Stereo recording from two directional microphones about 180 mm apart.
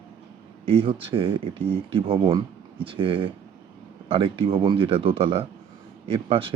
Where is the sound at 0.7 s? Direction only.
30° right (ahead or behind).